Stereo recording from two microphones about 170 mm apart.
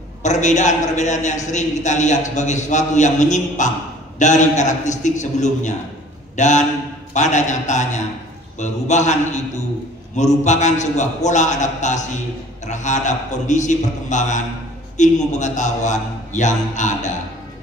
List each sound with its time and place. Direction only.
0.2 s a man's voice: 45° left (ahead or behind)